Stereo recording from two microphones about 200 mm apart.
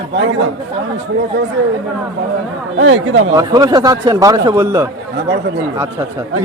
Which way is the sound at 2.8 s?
90° right.